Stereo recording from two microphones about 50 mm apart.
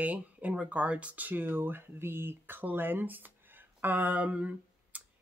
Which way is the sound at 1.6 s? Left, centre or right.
Right.